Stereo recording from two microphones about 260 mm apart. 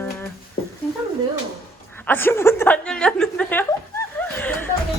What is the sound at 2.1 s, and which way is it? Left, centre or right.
Chuckle, centre.